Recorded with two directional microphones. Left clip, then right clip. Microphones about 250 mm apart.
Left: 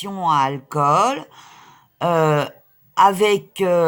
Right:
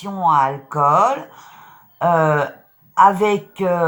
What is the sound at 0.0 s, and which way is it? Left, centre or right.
Speech, left.